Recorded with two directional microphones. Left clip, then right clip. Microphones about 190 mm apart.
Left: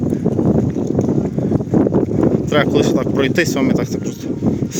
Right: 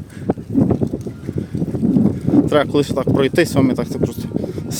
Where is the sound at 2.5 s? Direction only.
15° right (ahead or behind).